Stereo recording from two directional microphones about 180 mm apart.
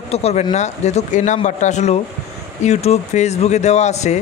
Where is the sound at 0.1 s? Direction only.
35° left (ahead or behind).